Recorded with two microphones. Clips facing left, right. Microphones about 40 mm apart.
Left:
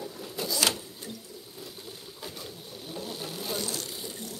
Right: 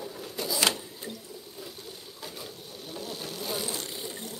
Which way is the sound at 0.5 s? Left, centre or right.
Right.